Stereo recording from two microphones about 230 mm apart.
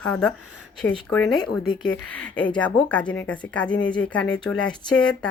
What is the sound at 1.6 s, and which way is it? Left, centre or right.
Speech, centre.